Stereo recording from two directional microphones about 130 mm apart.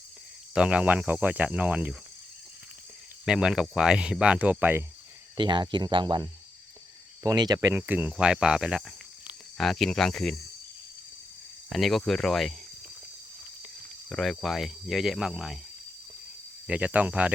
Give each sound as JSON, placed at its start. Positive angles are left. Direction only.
{"t": 0.5, "sound": "speech", "side_deg": -10}
{"t": 3.2, "sound": "speech", "side_deg": -5}
{"t": 5.4, "sound": "speech", "side_deg": -35}
{"t": 7.7, "sound": "speech", "side_deg": -15}
{"t": 11.7, "sound": "speech", "side_deg": 0}
{"t": 14.1, "sound": "speech", "side_deg": 0}
{"t": 16.6, "sound": "speech", "side_deg": -10}